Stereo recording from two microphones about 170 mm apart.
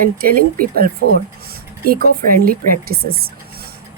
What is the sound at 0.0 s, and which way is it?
Speech, 60° right (ahead or behind).